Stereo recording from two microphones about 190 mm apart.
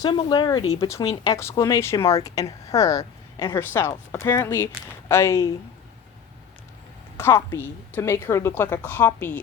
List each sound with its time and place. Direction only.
0.0 s speech: 25° left (ahead or behind)
7.2 s speech: 10° left (ahead or behind)